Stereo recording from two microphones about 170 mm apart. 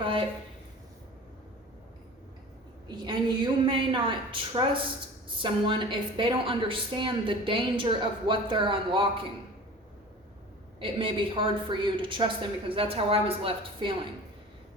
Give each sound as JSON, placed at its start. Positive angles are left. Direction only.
{"t": 0.0, "sound": "a sound", "side_deg": -30}
{"t": 2.8, "sound": "a woman's voice", "side_deg": -25}
{"t": 10.8, "sound": "a woman's voice", "side_deg": -30}